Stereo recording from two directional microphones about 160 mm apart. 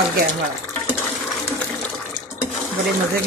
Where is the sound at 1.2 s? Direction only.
5° left (ahead or behind).